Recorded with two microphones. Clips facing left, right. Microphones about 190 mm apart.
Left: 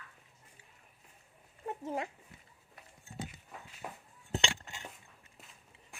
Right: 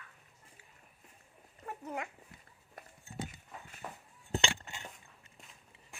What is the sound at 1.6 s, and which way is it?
Dog, 25° left (ahead or behind).